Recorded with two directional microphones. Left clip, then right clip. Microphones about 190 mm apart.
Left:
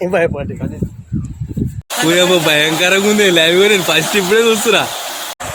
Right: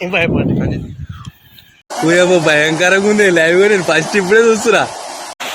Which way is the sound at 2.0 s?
5° left (ahead or behind).